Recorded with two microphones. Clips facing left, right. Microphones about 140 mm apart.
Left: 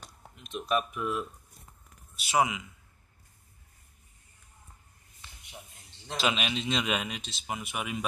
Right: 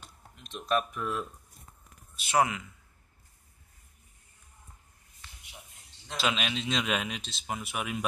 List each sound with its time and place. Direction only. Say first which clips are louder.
0.0 s a sound: left 2 dB; 5° left (ahead or behind)
2.2 s a man's voice: even; 10° left (ahead or behind)
6.1 s speech: left 1 dB; centre (ahead or behind)